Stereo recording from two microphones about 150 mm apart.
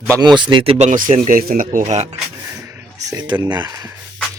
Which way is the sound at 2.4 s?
20° right (ahead or behind).